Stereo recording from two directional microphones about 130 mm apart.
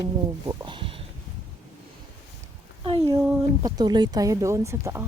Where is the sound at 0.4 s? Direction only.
40° right (ahead or behind).